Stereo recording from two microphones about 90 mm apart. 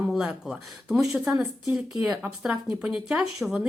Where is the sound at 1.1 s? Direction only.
25° right (ahead or behind).